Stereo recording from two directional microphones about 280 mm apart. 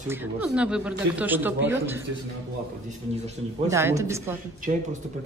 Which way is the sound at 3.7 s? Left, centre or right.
Centre.